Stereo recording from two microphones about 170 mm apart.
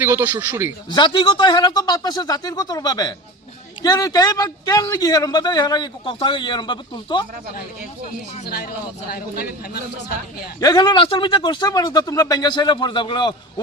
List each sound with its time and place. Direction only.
0.0 s speech: 15° right (ahead or behind)
0.9 s a man's voice: 25° left (ahead or behind)
8.4 s a man's voice: 65° left (ahead or behind)
10.6 s a man's voice: 25° left (ahead or behind)